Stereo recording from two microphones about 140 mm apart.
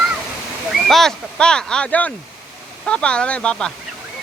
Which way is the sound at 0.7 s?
Centre (ahead or behind).